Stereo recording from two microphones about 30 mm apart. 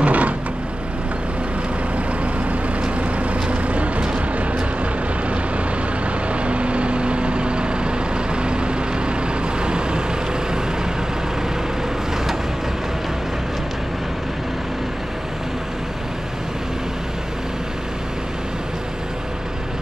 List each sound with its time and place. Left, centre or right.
0.0 s a sound: right
3.0 s vehicle: right
4.0 s vehicle: right
6.3 s vehicle: right